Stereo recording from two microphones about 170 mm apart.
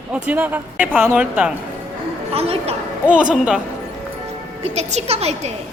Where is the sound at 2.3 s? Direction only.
35° right (ahead or behind).